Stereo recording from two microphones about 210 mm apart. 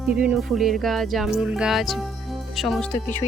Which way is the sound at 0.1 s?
5° right (ahead or behind).